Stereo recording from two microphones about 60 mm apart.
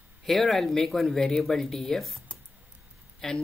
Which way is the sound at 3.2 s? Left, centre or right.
Centre.